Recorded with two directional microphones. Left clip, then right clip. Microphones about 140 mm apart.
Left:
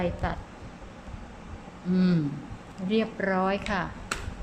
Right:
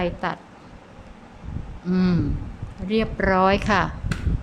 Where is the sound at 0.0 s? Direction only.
35° right (ahead or behind).